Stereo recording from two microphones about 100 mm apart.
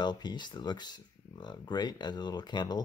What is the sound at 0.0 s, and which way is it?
Speech, 45° left (ahead or behind).